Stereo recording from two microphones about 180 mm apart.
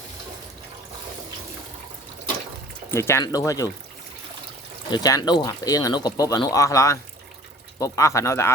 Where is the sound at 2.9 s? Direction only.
15° left (ahead or behind).